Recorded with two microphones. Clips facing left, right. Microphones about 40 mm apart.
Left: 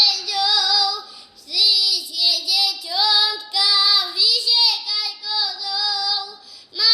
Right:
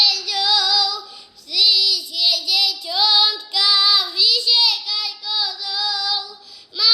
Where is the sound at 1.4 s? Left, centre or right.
Right.